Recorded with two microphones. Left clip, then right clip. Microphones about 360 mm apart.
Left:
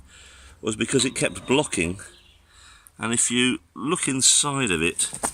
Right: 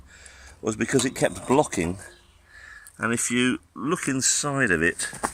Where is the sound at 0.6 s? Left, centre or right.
Centre.